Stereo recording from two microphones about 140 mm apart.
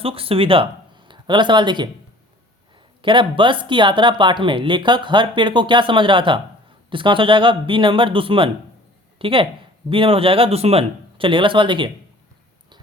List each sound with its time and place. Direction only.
0.0 s speech: 40° right (ahead or behind)
3.0 s speech: 35° right (ahead or behind)